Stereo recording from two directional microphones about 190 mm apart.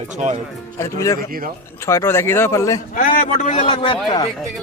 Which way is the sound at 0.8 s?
15° left (ahead or behind).